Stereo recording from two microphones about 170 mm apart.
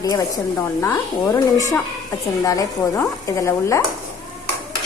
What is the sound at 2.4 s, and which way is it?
Speech, 20° left (ahead or behind).